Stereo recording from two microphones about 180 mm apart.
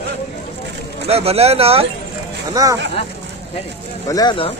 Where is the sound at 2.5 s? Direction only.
20° right (ahead or behind).